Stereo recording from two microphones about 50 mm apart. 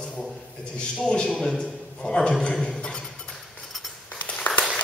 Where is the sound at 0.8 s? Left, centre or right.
Centre.